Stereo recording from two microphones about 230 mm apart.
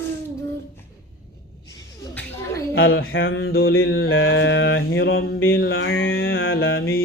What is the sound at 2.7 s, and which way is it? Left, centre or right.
Mantra, left.